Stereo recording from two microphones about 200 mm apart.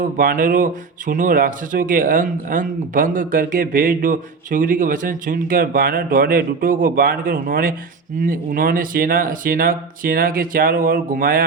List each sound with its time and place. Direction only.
0.0 s speech: 40° right (ahead or behind)